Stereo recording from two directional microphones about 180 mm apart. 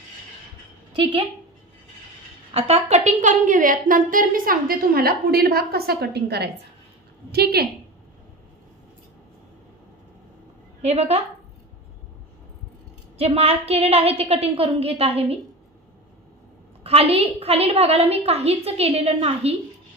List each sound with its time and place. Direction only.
2.5 s a woman's voice: 35° right (ahead or behind); by 7.6 s 60° right (ahead or behind)
10.8 s a woman's voice: 35° right (ahead or behind)
13.2 s a woman's voice: 35° right (ahead or behind)
16.8 s a woman's voice: 35° right (ahead or behind)